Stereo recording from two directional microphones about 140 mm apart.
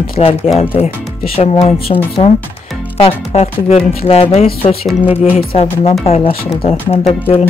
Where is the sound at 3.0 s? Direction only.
50° left (ahead or behind).